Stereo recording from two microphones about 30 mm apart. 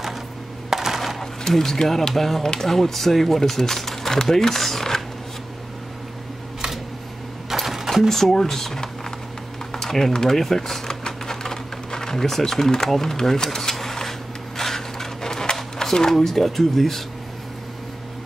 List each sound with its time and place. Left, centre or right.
0.7 s coin: centre
1.2 s speech: centre
7.5 s mechanisms: centre
8.1 s speech: centre
9.7 s a sound: centre
15.8 s speech: centre